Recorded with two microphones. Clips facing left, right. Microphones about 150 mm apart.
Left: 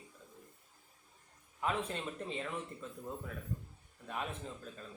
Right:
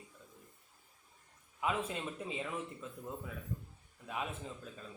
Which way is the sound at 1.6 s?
5° right (ahead or behind).